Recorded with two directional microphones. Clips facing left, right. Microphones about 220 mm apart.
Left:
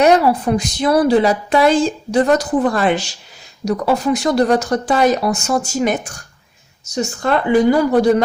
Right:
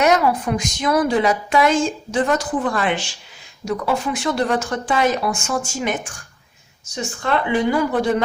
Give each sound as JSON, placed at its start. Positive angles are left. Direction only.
{"t": 0.0, "sound": "a woman's voice", "side_deg": 30}